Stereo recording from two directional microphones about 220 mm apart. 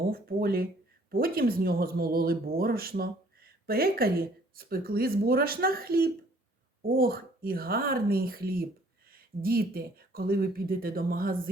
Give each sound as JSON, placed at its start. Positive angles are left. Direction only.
{"t": 0.0, "sound": "speech", "side_deg": -40}